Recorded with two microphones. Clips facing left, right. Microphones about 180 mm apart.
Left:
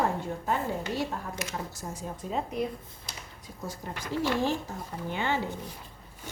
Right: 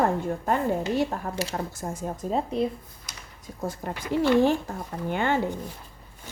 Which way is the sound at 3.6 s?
55° right (ahead or behind).